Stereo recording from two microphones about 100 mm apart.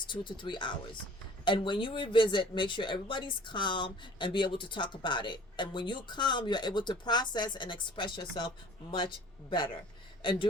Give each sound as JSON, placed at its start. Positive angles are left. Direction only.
{"t": 0.1, "sound": "speech", "side_deg": 50}